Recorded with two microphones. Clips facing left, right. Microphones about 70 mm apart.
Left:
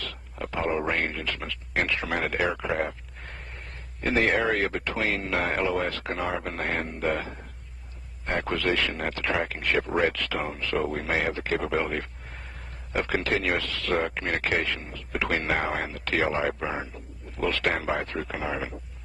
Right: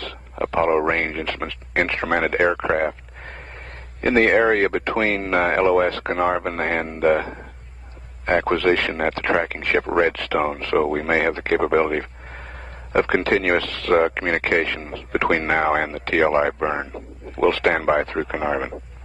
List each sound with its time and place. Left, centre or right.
0.0 s speech: right
4.0 s speech: right